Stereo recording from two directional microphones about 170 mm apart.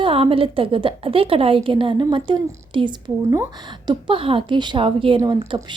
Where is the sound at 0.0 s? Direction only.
30° right (ahead or behind).